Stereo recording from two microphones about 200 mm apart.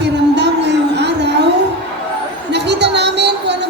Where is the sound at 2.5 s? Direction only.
60° right (ahead or behind).